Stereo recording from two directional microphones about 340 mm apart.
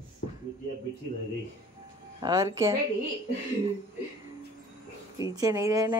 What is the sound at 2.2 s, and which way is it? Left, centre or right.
Speech, centre.